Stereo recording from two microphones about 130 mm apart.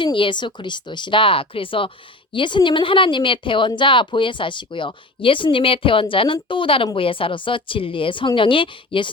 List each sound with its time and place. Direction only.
0.0 s speech: 40° left (ahead or behind)